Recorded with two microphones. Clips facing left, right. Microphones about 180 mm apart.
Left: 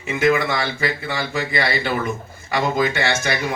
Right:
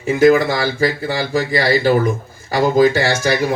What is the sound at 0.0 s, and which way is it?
Speech, 35° right (ahead or behind).